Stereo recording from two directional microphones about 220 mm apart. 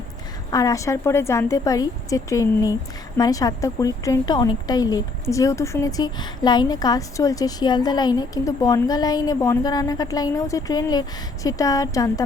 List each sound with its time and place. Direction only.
0.5 s speech: 15° left (ahead or behind)